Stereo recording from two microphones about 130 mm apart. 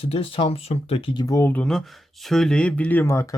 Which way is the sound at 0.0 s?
50° left (ahead or behind).